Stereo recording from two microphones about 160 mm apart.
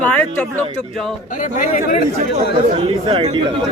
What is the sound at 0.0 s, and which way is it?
Speech, 10° left (ahead or behind).